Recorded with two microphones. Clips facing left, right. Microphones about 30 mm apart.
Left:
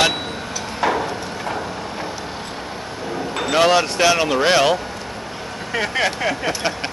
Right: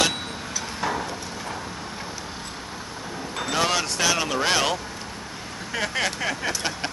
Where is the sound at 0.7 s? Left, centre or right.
Left.